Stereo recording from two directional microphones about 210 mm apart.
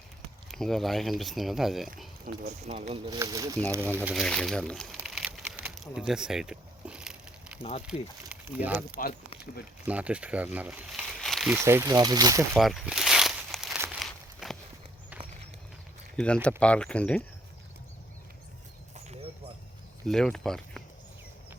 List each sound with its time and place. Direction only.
0.5 s speech: centre (ahead or behind)
2.3 s speech: 40° right (ahead or behind)
3.1 s speech: 15° right (ahead or behind)
4.1 s a sound: 5° left (ahead or behind)
7.9 s speech: 5° right (ahead or behind)
11.5 s speech: 15° right (ahead or behind)
12.5 s crumpling: centre (ahead or behind)
16.1 s speech: 5° left (ahead or behind)
18.9 s a sound: 30° right (ahead or behind)
20.1 s speech: centre (ahead or behind)